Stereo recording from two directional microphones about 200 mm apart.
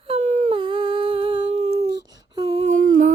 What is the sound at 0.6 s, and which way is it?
Humming, 25° right (ahead or behind).